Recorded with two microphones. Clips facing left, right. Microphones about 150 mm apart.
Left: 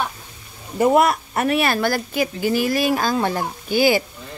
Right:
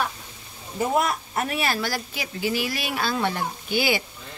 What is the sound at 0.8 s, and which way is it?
Speech, 70° left (ahead or behind).